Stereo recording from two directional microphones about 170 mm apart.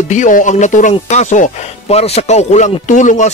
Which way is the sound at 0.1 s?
50° left (ahead or behind).